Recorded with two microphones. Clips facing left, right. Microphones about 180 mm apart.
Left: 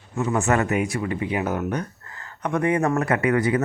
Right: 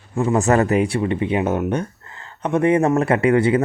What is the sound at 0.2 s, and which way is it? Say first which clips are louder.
Speech: right 5 dB; 35° right (ahead or behind).